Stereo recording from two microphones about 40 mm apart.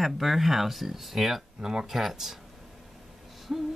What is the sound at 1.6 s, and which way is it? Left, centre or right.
Speech, centre.